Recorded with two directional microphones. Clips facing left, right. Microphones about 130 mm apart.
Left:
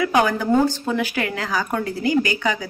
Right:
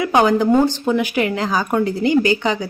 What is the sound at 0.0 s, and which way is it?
Speech, 20° right (ahead or behind).